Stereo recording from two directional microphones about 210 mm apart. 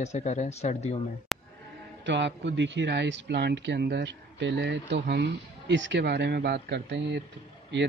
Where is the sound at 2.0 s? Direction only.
60° right (ahead or behind).